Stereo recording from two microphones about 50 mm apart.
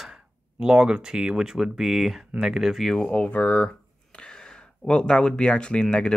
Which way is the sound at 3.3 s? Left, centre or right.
Left.